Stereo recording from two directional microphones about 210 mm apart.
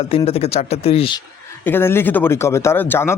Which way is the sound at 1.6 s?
10° left (ahead or behind).